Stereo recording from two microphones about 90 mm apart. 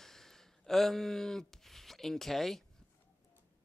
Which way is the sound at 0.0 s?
5° left (ahead or behind).